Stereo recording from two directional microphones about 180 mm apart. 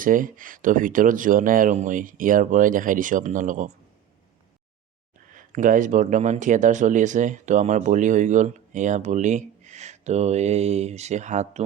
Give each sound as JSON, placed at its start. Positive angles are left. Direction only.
{"t": 0.0, "sound": "speech", "side_deg": -50}
{"t": 5.3, "sound": "speech", "side_deg": -45}